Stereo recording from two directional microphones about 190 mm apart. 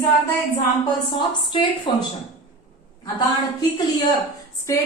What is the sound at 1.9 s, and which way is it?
Speech, 25° left (ahead or behind).